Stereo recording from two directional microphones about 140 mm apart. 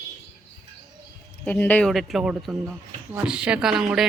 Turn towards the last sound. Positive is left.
turn(degrees=-5)  # may be behind; listen again after turning